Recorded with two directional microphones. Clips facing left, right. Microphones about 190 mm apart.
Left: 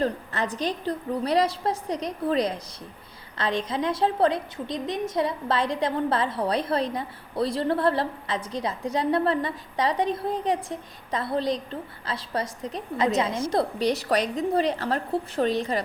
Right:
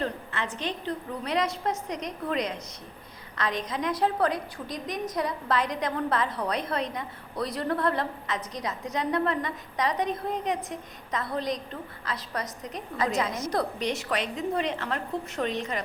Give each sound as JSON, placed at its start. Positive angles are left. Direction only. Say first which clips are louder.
{"t": 0.0, "sound": "a woman's voice", "louder": "left 5 dB", "side_deg": 40}